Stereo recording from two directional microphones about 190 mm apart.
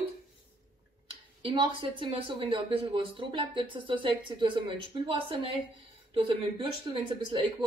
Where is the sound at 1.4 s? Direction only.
25° right (ahead or behind).